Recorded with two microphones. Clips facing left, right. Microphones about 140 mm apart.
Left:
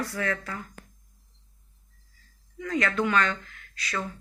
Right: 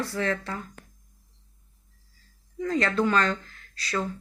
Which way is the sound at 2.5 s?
30° right (ahead or behind).